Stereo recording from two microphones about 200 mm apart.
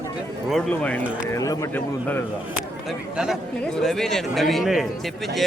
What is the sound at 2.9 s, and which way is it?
A man's voice, centre (ahead or behind).